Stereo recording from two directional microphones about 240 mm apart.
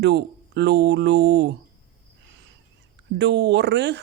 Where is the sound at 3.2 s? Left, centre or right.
Right.